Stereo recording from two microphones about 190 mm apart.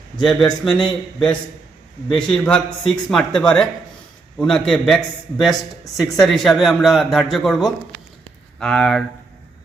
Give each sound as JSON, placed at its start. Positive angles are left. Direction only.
{"t": 0.2, "sound": "a man's voice", "side_deg": 0}